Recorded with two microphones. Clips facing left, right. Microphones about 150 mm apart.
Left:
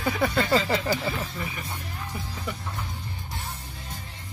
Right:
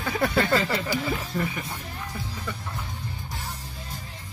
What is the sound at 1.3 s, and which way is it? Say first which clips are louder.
Speech: right 6 dB; 45° right (ahead or behind).